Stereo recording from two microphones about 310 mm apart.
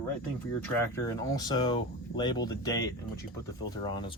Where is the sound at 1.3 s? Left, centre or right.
Centre.